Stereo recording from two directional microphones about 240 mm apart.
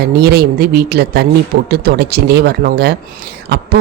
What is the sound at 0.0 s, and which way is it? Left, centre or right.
Speech, right.